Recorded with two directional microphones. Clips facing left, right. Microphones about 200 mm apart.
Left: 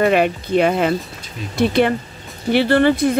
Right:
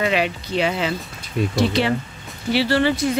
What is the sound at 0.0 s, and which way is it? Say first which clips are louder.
Speech: left 6 dB; 50° left (ahead or behind).